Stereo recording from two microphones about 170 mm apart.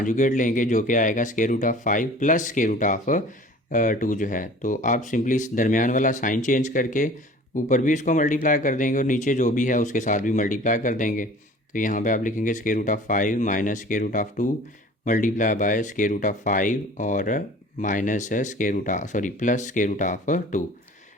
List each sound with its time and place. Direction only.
0.0 s speech: 50° left (ahead or behind)